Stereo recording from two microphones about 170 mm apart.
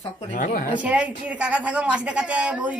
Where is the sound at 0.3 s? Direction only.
50° left (ahead or behind).